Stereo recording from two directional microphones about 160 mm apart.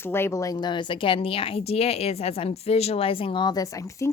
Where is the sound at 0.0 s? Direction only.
15° left (ahead or behind).